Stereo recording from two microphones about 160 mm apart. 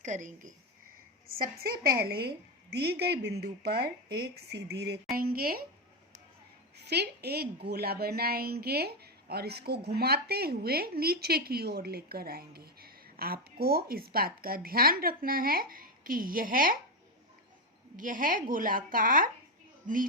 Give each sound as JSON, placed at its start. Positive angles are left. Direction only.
{"t": 0.0, "sound": "speech", "side_deg": -50}
{"t": 1.4, "sound": "a woman's voice", "side_deg": -65}
{"t": 5.1, "sound": "a woman's voice", "side_deg": -65}
{"t": 6.7, "sound": "a woman's voice", "side_deg": -90}
{"t": 17.9, "sound": "speech", "side_deg": -55}